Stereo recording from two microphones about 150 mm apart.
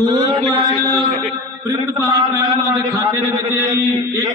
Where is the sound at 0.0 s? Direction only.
25° right (ahead or behind).